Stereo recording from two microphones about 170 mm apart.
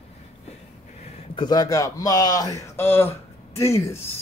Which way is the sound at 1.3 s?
25° left (ahead or behind).